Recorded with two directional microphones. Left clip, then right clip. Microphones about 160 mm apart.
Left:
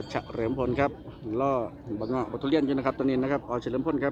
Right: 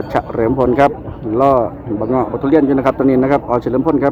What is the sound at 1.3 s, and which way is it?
A man's voice, 15° left (ahead or behind).